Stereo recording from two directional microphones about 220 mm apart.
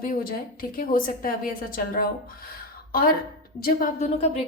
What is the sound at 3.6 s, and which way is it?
Speech, 40° left (ahead or behind).